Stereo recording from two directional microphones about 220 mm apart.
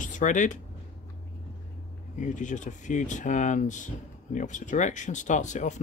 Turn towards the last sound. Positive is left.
turn(degrees=35)  # may be behind; listen again after turning